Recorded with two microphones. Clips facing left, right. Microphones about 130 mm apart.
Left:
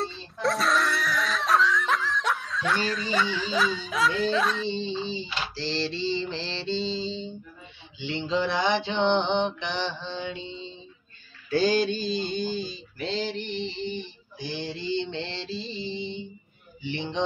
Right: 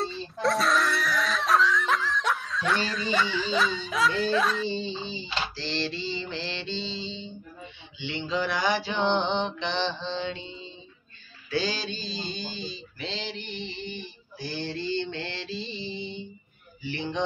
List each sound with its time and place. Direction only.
0.0 s a sound: centre (ahead or behind)
5.0 s mantra: 35° left (ahead or behind); by 10.5 s 15° left (ahead or behind)
11.5 s mantra: 50° left (ahead or behind); by 14.0 s 30° left (ahead or behind)
14.4 s mantra: 15° left (ahead or behind)
16.8 s mantra: 20° left (ahead or behind)